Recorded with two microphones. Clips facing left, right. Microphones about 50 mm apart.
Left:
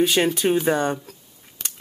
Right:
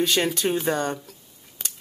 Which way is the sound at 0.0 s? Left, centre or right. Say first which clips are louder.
Left 3 dB; centre.